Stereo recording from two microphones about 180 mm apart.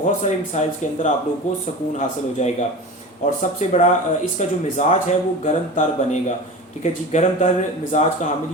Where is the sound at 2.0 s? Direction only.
40° left (ahead or behind).